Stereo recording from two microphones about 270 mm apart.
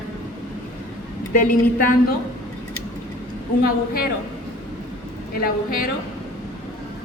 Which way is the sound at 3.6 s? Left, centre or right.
Left.